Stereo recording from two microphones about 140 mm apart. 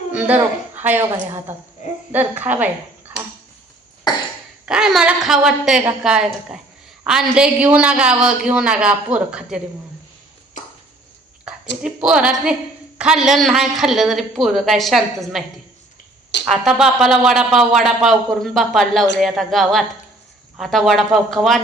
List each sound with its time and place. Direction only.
0.1 s a woman's voice: 10° right (ahead or behind)
1.8 s a child's voice: 60° left (ahead or behind)
2.1 s a woman's voice: 10° right (ahead or behind)
4.1 s cough: 30° left (ahead or behind)
4.6 s a woman's voice: 5° right (ahead or behind)
11.4 s a woman's voice: 5° right (ahead or behind)